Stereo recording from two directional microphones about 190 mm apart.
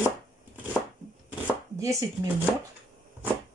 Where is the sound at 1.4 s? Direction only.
15° right (ahead or behind).